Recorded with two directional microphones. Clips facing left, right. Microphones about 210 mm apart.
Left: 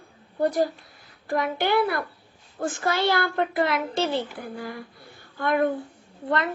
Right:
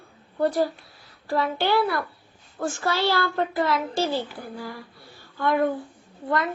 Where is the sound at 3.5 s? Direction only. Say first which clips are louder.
Even; 60° left (ahead or behind).